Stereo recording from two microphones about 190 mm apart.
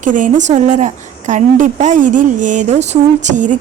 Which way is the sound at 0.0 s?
45° right (ahead or behind).